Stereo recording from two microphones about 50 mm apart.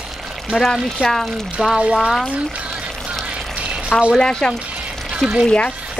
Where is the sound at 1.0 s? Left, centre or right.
Right.